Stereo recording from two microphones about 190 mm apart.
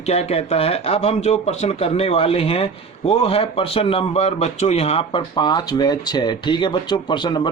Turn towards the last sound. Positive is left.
turn(degrees=25)  # may be behind; listen again after turning